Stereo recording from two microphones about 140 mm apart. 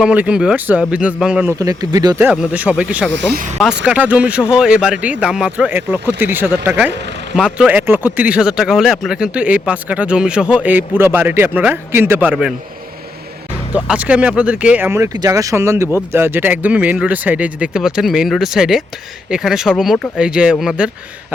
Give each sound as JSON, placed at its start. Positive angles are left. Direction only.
{"t": 0.0, "sound": "speech", "side_deg": -10}
{"t": 1.5, "sound": "speech", "side_deg": -25}
{"t": 2.2, "sound": "speech", "side_deg": -10}
{"t": 13.7, "sound": "speech", "side_deg": -10}